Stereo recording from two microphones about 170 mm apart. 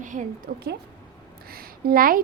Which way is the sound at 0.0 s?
50° right (ahead or behind).